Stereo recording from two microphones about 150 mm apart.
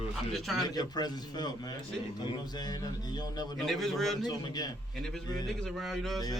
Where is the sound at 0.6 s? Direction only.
25° left (ahead or behind).